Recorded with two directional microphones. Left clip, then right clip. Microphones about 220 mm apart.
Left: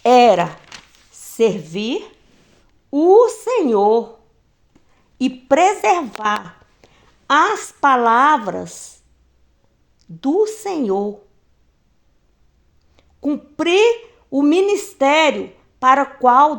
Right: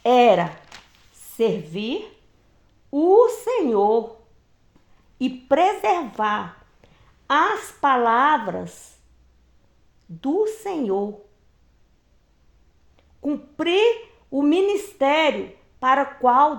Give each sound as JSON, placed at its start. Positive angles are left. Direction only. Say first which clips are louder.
{"t": 0.0, "sound": "a woman's voice", "louder": "left 4 dB", "side_deg": 40}
{"t": 5.1, "sound": "a woman's voice", "louder": "left 4 dB", "side_deg": 40}
{"t": 10.2, "sound": "a woman's voice", "louder": "left 5 dB", "side_deg": 35}
{"t": 13.0, "sound": "a woman's voice", "louder": "left 5 dB", "side_deg": 35}